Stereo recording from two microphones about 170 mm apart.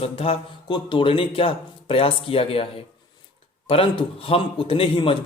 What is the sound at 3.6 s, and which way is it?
Speech, 30° left (ahead or behind).